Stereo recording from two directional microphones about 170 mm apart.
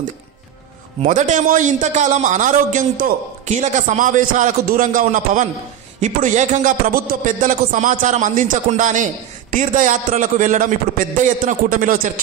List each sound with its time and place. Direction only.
1.0 s a man's voice: 50° right (ahead or behind)